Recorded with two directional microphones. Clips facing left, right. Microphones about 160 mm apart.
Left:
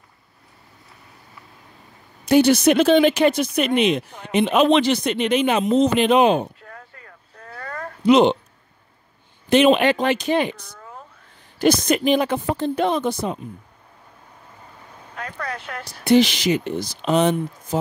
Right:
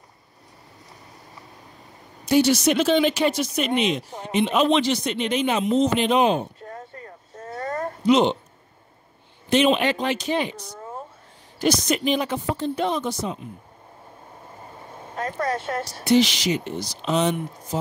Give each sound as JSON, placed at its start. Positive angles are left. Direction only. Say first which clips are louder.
{"t": 2.2, "sound": "speech", "louder": "left 4 dB", "side_deg": 55}
{"t": 6.6, "sound": "a sound", "louder": "right 5 dB", "side_deg": -30}
{"t": 7.3, "sound": "a sound", "louder": "right 5 dB", "side_deg": -40}
{"t": 8.1, "sound": "speech", "louder": "left 4 dB", "side_deg": 65}
{"t": 9.5, "sound": "speech", "louder": "left 4 dB", "side_deg": 60}
{"t": 14.6, "sound": "vehicle", "louder": "right 4 dB", "side_deg": -25}
{"t": 15.1, "sound": "speech", "louder": "right 5 dB", "side_deg": -40}
{"t": 16.0, "sound": "speech", "louder": "left 3 dB", "side_deg": 55}